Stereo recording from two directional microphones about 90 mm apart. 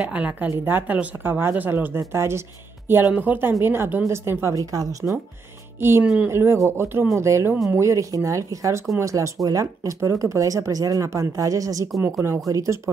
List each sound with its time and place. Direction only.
0.0 s a woman's voice: 15° right (ahead or behind); by 5.1 s 40° right (ahead or behind)
5.8 s a woman's voice: 25° right (ahead or behind)